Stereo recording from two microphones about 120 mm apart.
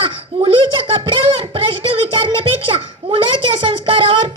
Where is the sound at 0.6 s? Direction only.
45° right (ahead or behind).